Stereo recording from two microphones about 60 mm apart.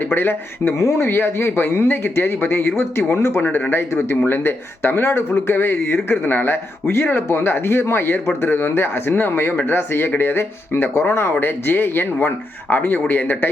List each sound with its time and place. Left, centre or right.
0.1 s speech: left
0.8 s speech: left